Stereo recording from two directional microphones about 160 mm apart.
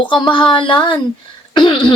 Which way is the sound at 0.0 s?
30° left (ahead or behind).